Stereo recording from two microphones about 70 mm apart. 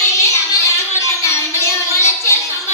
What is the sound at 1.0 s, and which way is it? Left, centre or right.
Music, left.